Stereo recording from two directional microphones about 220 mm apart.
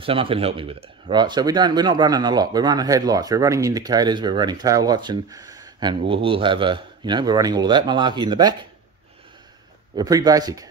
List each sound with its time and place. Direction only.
0.0 s speech: 25° right (ahead or behind)
9.9 s speech: 15° right (ahead or behind)